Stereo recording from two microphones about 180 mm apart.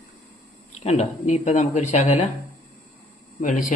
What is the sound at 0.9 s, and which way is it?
Speech, 40° left (ahead or behind).